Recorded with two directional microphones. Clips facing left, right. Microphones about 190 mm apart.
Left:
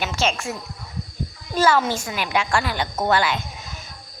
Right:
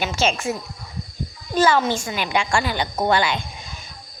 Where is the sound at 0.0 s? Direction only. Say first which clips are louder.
Right 2 dB; centre (ahead or behind).